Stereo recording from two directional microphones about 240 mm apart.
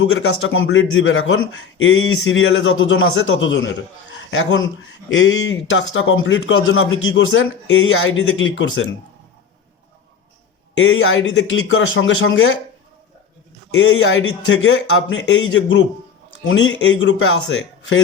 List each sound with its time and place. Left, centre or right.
0.0 s a man's voice: left
10.8 s a man's voice: left
13.7 s a man's voice: left